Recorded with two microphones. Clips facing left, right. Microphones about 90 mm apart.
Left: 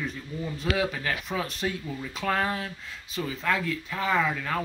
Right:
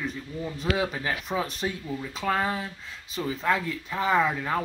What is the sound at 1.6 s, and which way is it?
Speech, 10° right (ahead or behind).